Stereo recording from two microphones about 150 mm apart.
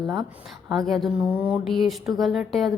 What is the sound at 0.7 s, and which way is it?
Speech, centre (ahead or behind).